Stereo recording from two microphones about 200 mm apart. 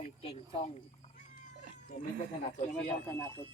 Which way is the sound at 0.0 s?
30° left (ahead or behind).